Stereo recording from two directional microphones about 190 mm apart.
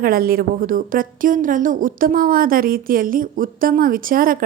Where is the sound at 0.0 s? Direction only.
50° right (ahead or behind).